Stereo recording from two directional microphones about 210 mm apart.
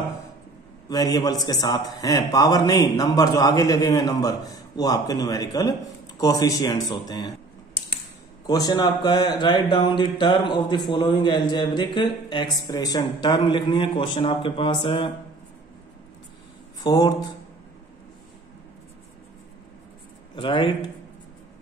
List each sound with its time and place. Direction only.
0.8 s a man's voice: 20° left (ahead or behind)
8.5 s speech: 20° left (ahead or behind)
16.8 s speech: 20° left (ahead or behind)
20.3 s speech: 25° left (ahead or behind)